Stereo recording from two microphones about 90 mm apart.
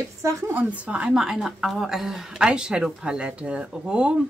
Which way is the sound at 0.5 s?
15° right (ahead or behind).